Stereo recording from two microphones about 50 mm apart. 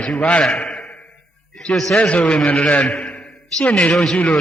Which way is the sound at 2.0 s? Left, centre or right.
Left.